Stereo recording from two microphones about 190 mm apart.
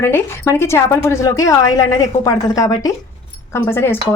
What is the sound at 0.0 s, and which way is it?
Speech, 15° left (ahead or behind).